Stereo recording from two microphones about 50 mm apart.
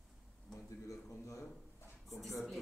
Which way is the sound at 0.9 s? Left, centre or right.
Left.